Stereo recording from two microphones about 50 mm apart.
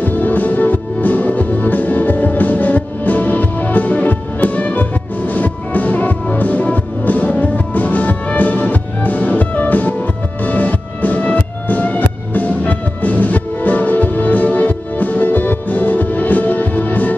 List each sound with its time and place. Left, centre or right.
0.0 s music: left